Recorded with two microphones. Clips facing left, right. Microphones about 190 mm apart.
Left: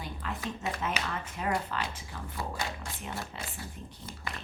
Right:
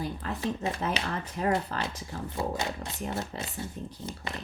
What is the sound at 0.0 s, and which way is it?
Speech, 35° right (ahead or behind).